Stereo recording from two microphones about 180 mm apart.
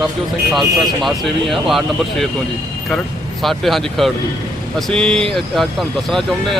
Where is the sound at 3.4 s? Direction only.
Centre (ahead or behind).